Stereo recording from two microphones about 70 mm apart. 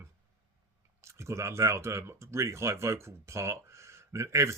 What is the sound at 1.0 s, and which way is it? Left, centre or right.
Speech, right.